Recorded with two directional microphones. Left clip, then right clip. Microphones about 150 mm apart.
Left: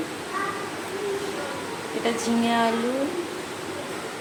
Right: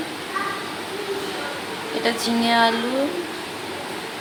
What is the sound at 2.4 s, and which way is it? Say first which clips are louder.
Speech: right 6 dB; centre (ahead or behind).